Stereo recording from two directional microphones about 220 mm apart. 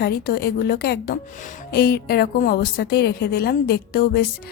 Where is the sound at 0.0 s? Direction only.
45° left (ahead or behind).